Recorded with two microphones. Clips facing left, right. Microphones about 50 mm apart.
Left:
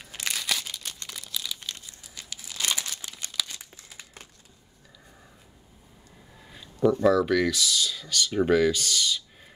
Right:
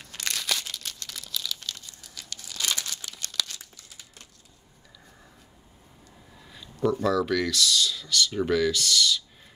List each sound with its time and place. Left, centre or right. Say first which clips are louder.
0.0 s crumpling: even; centre
0.9 s a sound: even; centre
1.2 s crumpling: right 1 dB; centre
3.5 s crumpling: left 2 dB; left
7.0 s speech: left 4 dB; centre